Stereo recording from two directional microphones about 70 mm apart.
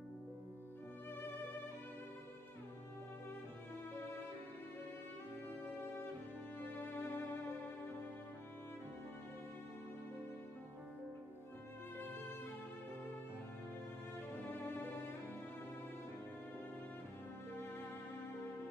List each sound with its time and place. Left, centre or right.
6.6 s music: left
14.6 s music: left